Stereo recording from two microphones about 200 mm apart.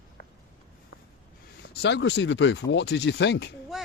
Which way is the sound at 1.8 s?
65° left (ahead or behind).